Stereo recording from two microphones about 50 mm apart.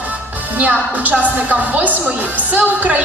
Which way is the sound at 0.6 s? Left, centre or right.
Right.